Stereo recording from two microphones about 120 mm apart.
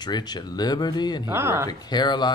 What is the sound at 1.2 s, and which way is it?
Speech, 20° right (ahead or behind).